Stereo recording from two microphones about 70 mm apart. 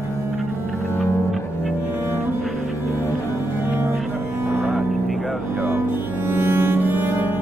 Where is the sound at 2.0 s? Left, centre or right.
Right.